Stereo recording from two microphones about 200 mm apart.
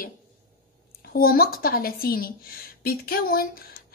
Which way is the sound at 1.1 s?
50° left (ahead or behind).